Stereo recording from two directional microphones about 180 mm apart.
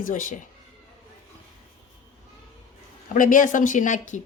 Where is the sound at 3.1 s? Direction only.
45° left (ahead or behind).